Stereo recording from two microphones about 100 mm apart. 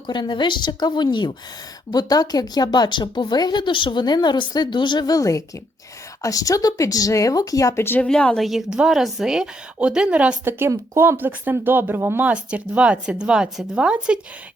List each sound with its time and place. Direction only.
0.1 s speech: 50° left (ahead or behind); by 8.0 s 25° left (ahead or behind)
8.0 s a woman's voice: 10° left (ahead or behind)
8.4 s speech: 5° right (ahead or behind)
10.4 s speech: 25° right (ahead or behind)